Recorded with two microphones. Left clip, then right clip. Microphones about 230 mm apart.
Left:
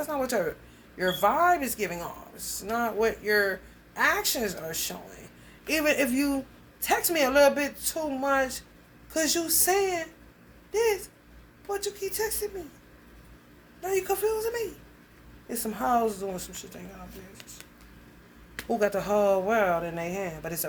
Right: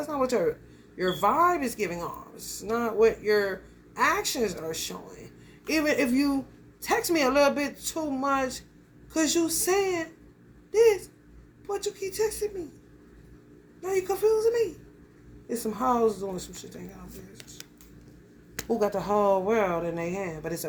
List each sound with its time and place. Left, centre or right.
0.0 s a sound: centre
0.9 s speech: centre
10.7 s a sound: centre
11.7 s speech: centre
13.8 s speech: centre
18.7 s speech: left